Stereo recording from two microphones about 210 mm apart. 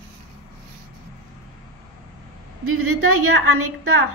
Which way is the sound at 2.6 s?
90° right.